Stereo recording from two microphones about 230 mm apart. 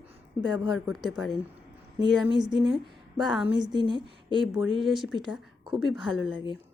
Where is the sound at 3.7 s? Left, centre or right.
Centre.